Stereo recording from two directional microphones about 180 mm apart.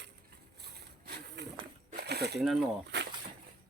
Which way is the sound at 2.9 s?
70° right (ahead or behind).